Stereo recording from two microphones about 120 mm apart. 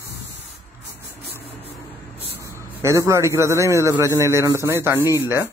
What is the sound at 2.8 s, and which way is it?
A man's voice, 25° right (ahead or behind).